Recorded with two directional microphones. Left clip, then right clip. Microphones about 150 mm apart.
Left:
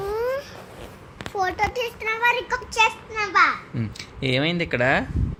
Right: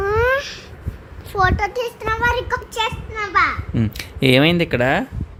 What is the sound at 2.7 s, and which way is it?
Speech, 5° right (ahead or behind).